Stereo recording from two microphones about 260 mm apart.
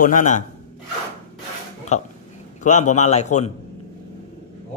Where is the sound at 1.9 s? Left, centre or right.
Left.